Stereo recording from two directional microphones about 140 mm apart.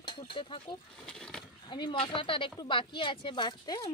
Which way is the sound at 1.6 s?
35° left (ahead or behind).